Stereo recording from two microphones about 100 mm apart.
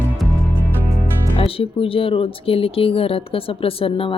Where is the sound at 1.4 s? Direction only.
70° left (ahead or behind).